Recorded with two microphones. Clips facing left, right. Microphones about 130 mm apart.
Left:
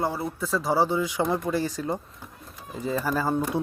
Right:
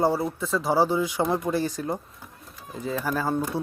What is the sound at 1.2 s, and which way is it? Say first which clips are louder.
Speech: right 1 dB; 5° right (ahead or behind).